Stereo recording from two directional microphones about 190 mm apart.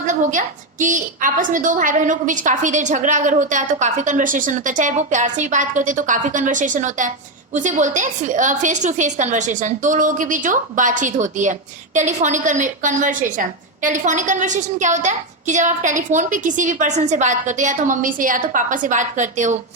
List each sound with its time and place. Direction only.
0.0 s a woman's voice: 40° right (ahead or behind)